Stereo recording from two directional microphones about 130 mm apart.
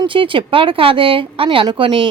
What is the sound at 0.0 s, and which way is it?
Speech, 40° right (ahead or behind).